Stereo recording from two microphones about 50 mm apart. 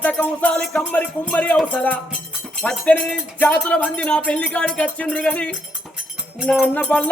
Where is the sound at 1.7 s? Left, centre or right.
Left.